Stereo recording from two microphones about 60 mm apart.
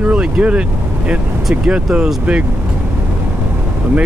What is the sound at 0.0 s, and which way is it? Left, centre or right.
Speech, right.